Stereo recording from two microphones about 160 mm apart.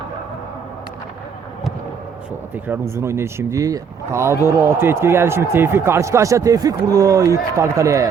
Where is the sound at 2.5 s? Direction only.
10° right (ahead or behind).